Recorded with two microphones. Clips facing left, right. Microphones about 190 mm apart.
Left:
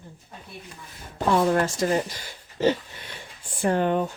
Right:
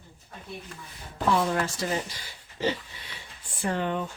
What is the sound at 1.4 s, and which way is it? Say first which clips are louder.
Speech: left 6 dB; 45° left (ahead or behind).